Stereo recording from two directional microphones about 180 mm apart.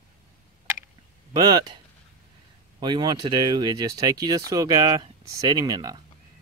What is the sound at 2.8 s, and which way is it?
Speech, 25° right (ahead or behind).